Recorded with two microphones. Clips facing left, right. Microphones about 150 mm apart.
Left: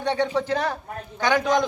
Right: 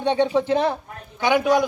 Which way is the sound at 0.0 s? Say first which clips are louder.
Right 4 dB; 15° right (ahead or behind).